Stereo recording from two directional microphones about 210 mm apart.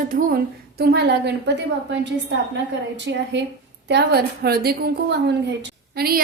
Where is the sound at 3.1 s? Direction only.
60° right (ahead or behind).